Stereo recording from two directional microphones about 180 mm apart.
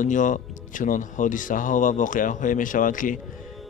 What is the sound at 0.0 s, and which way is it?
Speech, 45° left (ahead or behind).